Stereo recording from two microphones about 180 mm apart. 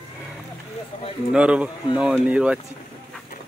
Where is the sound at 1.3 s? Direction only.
5° right (ahead or behind).